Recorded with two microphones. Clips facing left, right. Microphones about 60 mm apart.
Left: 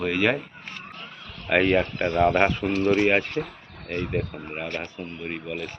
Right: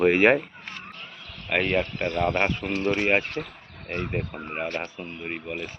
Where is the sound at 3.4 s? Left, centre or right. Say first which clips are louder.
Left 4 dB; centre.